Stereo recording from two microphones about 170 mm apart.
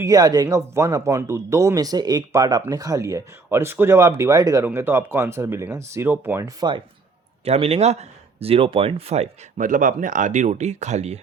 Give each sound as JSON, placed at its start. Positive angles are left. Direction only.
{"t": 0.0, "sound": "speech", "side_deg": -20}
{"t": 7.4, "sound": "speech", "side_deg": -40}